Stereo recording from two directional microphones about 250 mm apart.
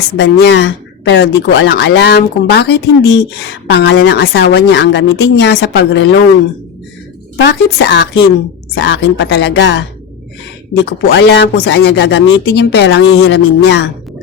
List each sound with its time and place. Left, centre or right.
0.2 s speech: left
7.4 s speech: left
10.8 s speech: left